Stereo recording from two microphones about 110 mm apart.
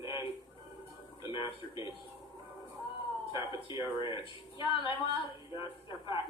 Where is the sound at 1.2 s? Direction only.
45° left (ahead or behind).